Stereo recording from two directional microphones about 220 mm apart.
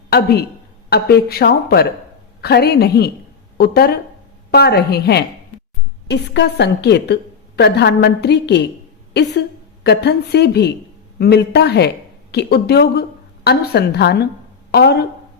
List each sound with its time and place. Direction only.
0.1 s a woman's voice: 45° left (ahead or behind)
9.8 s a woman's voice: 50° left (ahead or behind)